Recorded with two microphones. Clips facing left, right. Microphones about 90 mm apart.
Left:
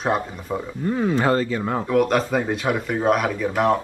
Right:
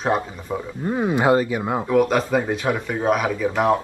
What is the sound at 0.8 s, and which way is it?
Speech, 20° right (ahead or behind).